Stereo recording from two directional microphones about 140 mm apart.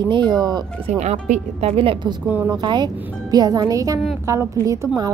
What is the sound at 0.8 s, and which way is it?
Speech, 50° right (ahead or behind).